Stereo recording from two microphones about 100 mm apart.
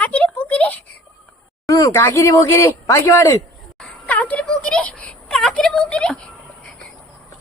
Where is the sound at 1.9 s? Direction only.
25° left (ahead or behind).